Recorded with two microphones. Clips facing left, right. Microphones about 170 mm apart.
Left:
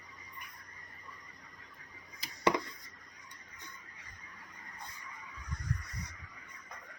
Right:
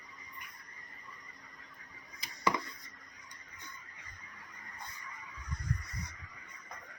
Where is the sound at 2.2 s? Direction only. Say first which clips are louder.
Left 3 dB; 30° left (ahead or behind).